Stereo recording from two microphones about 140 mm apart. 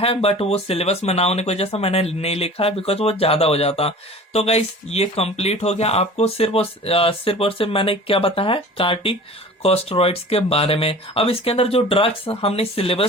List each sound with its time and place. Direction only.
0.0 s speech: 45° left (ahead or behind)